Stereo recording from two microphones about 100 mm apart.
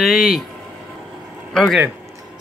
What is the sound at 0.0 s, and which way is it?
Speech, 5° right (ahead or behind).